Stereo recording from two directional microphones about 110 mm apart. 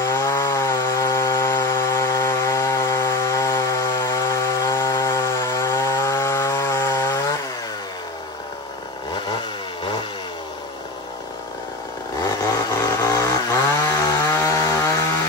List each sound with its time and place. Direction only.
0.0 s sawing: 25° left (ahead or behind)
12.5 s chainsaw: 30° left (ahead or behind)